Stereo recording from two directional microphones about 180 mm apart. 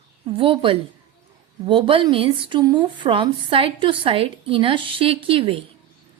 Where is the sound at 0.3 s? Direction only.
30° right (ahead or behind).